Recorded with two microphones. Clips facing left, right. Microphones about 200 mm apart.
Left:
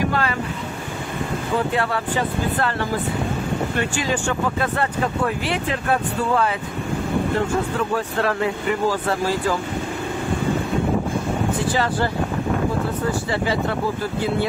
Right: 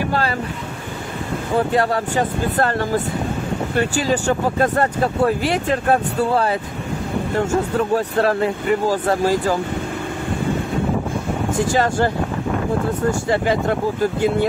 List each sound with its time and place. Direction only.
1.7 s speech: 40° right (ahead or behind)
11.7 s speech: 45° right (ahead or behind)
13.3 s speech: 50° right (ahead or behind)